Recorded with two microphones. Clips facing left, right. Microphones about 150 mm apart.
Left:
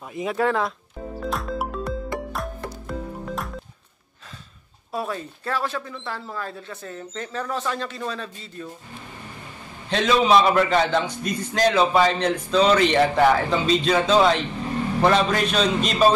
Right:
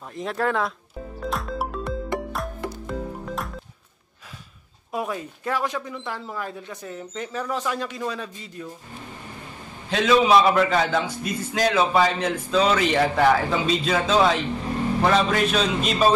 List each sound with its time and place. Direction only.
0.1 s a man's voice: 5° left (ahead or behind)
1.2 s music: centre (ahead or behind)
4.9 s speech: 15° right (ahead or behind)
9.8 s a man's voice: 5° right (ahead or behind)